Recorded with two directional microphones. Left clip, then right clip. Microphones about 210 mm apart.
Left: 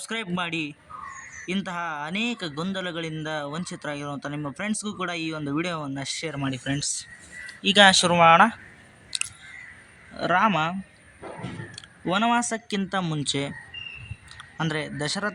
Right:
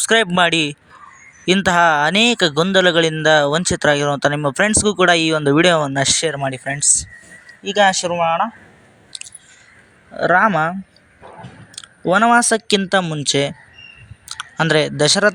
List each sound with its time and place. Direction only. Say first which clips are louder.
0.0 s a man's voice: right 16 dB; 45° right (ahead or behind)
7.4 s speech: right 2 dB; 5° right (ahead or behind)
8.1 s speech: left 2 dB; 10° left (ahead or behind)
9.1 s chewing: left 3 dB; 10° right (ahead or behind)
10.2 s a man's voice: right 8 dB; 35° right (ahead or behind)
11.7 s speech: right 11 dB; 35° right (ahead or behind)
13.0 s speech: right 9 dB; 20° right (ahead or behind)
14.3 s speech: right 13 dB; 30° right (ahead or behind)